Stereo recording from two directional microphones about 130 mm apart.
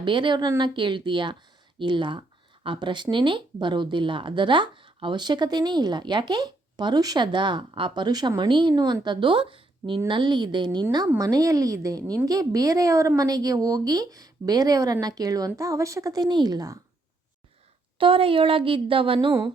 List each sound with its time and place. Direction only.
0.0 s a woman's voice: 40° right (ahead or behind)
17.9 s speech: 45° right (ahead or behind)